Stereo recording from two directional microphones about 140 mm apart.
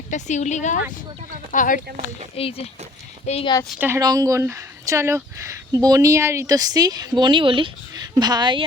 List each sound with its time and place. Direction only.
0.1 s speech: 60° left (ahead or behind)
1.5 s speech: 75° left (ahead or behind)
2.3 s speech: 45° left (ahead or behind)
3.4 s a woman's voice: 25° left (ahead or behind)
3.8 s a woman's voice: 15° right (ahead or behind); by 8.6 s 35° right (ahead or behind)